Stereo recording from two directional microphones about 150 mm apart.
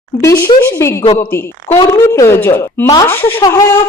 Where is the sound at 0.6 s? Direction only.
20° left (ahead or behind).